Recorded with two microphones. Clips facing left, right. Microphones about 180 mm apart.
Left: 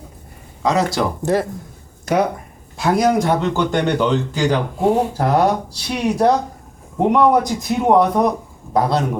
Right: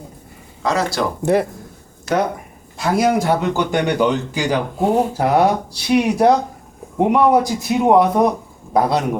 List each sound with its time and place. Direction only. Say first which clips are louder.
0.6 s speech: left 2 dB; 20° left (ahead or behind)
1.2 s a man's voice: right 3 dB; 15° right (ahead or behind)
2.7 s a man's voice: left 1 dB; centre (ahead or behind)